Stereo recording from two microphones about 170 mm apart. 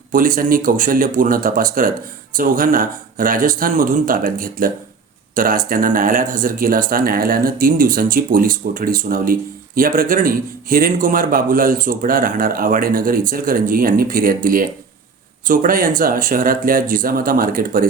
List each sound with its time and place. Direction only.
0.1 s speech: 55° right (ahead or behind)